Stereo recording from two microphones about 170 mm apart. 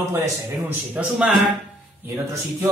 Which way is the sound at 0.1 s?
15° right (ahead or behind).